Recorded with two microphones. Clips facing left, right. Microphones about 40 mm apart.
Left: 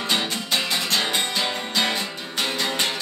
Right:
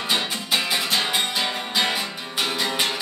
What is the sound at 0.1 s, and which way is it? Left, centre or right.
Music, centre.